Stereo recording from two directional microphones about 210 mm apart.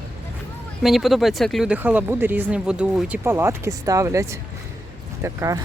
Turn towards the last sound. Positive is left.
turn(degrees=-15)  # may be behind; listen again after turning